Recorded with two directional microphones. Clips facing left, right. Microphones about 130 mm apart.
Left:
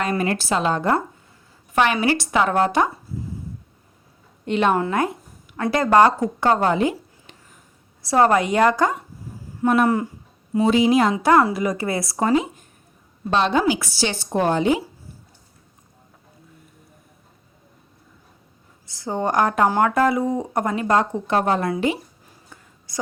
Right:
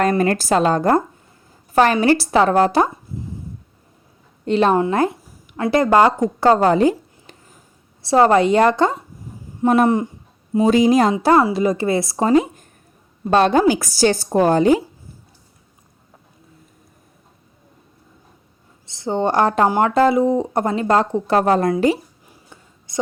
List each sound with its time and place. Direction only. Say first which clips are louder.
0.0 s a woman's voice: right 5 dB; 45° right (ahead or behind)
4.4 s a woman's voice: right 4 dB; 35° right (ahead or behind)
4.9 s a sound: right 4 dB; 30° right (ahead or behind)
5.7 s speech: right 2 dB; 20° right (ahead or behind)
6.4 s a sound: right 5 dB; 35° right (ahead or behind)
8.0 s speech: right 4 dB; 25° right (ahead or behind)
10.6 s a woman's voice: right 3 dB; 40° right (ahead or behind); by 12.3 s 25° right (ahead or behind)
12.3 s speech: right 7 dB; 45° right (ahead or behind)
18.9 s speech: right 4 dB; 25° right (ahead or behind); by 21.9 s 40° right (ahead or behind)
22.9 s a woman's voice: right 5 dB; 25° right (ahead or behind)